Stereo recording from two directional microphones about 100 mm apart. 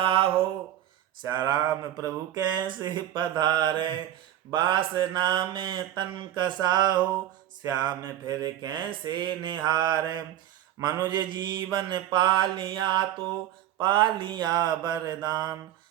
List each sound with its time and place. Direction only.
0.0 s a sound: 60° right (ahead or behind)
1.3 s speech: 45° right (ahead or behind)
10.8 s speech: 40° right (ahead or behind)